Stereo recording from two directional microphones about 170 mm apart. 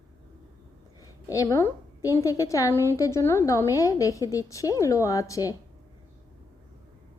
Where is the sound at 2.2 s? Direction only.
20° left (ahead or behind).